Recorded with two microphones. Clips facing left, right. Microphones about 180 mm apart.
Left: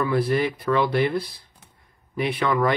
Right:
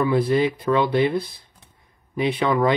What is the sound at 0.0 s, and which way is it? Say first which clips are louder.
Speech: right 3 dB; 20° right (ahead or behind).